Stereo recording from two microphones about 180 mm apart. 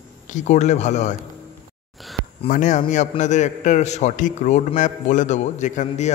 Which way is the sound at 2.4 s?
45° left (ahead or behind).